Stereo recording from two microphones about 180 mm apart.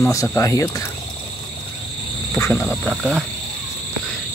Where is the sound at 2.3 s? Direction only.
15° left (ahead or behind).